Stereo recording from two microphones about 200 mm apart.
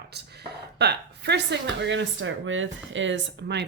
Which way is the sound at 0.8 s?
55° right (ahead or behind).